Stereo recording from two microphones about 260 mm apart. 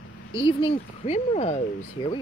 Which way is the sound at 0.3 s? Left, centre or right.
Centre.